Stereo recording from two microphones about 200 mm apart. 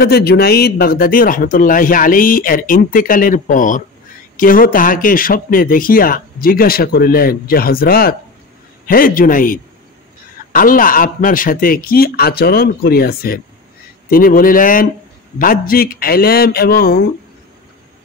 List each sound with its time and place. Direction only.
0.0 s speech: 50° left (ahead or behind)